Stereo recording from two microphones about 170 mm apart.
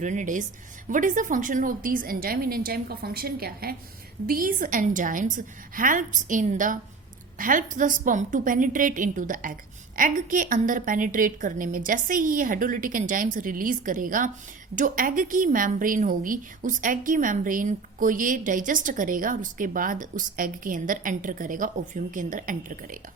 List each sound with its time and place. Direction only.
0.0 s a woman's voice: 45° right (ahead or behind)